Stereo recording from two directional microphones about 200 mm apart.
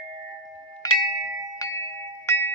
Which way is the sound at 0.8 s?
20° left (ahead or behind).